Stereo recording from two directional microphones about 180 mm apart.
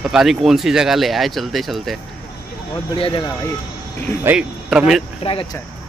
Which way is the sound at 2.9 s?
30° left (ahead or behind).